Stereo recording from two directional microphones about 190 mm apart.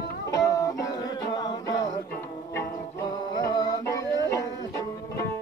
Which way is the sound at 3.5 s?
20° left (ahead or behind).